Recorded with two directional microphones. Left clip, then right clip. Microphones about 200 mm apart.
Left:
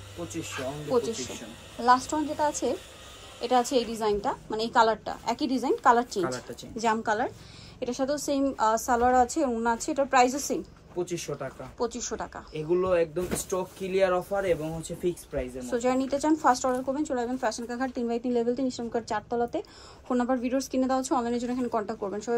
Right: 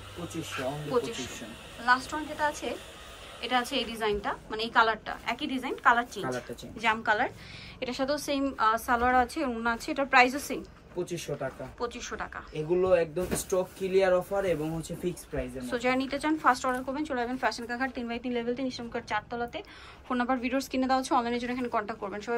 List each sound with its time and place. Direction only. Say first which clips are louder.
0.6 s speech: even; centre (ahead or behind)
0.9 s a woman's voice: left 4 dB; 25° left (ahead or behind)
11.0 s speech: left 1 dB; 5° left (ahead or behind)
11.8 s a woman's voice: left 4 dB; 25° left (ahead or behind)
12.5 s speech: even; 5° left (ahead or behind)
15.6 s a woman's voice: left 2 dB; 20° left (ahead or behind)
20.1 s a woman's voice: left 2 dB; 20° left (ahead or behind)